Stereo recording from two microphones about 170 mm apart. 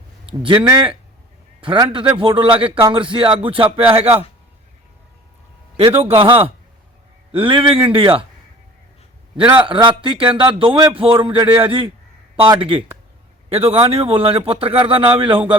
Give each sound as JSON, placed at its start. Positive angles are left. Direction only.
{"t": 0.3, "sound": "speech", "side_deg": -30}
{"t": 1.6, "sound": "a man's voice", "side_deg": -30}
{"t": 5.7, "sound": "a man's voice", "side_deg": -35}
{"t": 9.4, "sound": "a man's voice", "side_deg": -10}
{"t": 9.6, "sound": "a man's voice", "side_deg": -30}